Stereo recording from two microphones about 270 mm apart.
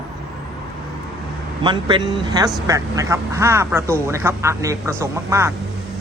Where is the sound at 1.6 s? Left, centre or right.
Centre.